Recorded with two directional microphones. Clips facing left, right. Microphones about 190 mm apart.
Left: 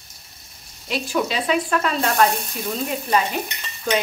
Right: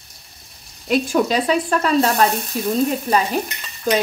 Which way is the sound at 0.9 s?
45° right (ahead or behind).